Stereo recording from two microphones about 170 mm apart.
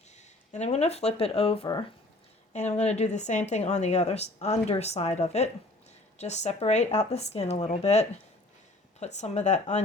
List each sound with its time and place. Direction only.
0.2 s speech: 40° left (ahead or behind)